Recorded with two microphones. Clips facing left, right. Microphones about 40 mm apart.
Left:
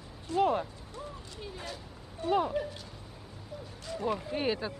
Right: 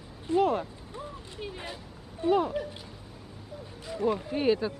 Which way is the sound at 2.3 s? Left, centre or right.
Centre.